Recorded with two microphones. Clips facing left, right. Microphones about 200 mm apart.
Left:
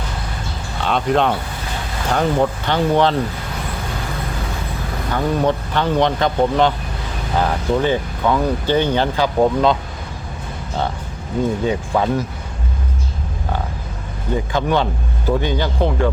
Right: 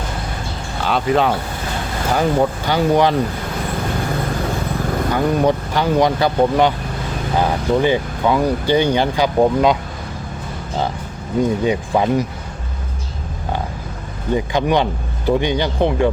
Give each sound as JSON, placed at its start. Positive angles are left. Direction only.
{"t": 0.8, "sound": "speech", "side_deg": 0}
{"t": 5.1, "sound": "speech", "side_deg": -10}
{"t": 11.6, "sound": "speech", "side_deg": -15}
{"t": 14.3, "sound": "speech", "side_deg": -15}